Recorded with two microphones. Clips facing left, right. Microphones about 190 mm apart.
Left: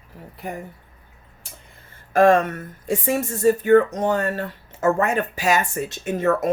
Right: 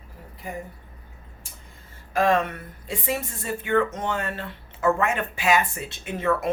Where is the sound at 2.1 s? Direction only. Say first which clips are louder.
Left 6 dB; 50° left (ahead or behind).